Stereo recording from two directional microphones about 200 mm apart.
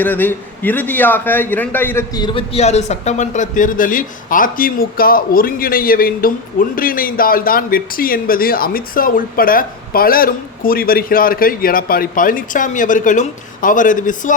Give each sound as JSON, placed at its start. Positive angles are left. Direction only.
{"t": 0.0, "sound": "a man's voice", "side_deg": 10}